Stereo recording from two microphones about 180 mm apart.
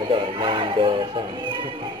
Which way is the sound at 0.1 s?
30° right (ahead or behind).